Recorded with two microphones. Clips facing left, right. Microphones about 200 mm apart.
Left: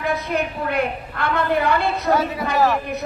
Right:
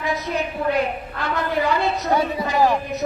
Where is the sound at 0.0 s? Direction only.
55° left (ahead or behind).